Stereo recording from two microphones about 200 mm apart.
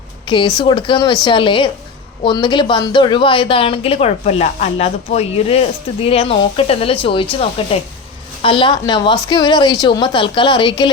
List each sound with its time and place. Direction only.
0.3 s a woman's voice: 25° left (ahead or behind)